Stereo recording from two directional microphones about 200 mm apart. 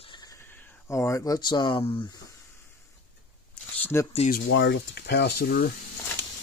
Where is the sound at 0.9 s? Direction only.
15° left (ahead or behind).